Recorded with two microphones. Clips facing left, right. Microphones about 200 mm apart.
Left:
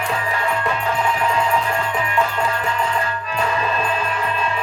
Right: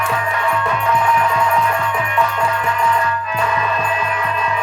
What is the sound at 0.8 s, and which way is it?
Music, 30° left (ahead or behind).